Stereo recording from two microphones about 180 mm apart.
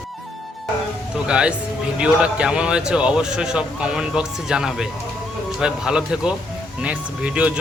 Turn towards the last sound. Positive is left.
turn(degrees=-5)  # may be behind; listen again after turning